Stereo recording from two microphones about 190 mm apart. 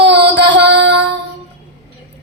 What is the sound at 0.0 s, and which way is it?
Music, 65° right (ahead or behind).